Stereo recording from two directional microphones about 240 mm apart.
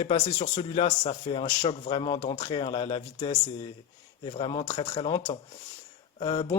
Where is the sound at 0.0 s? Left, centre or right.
Left.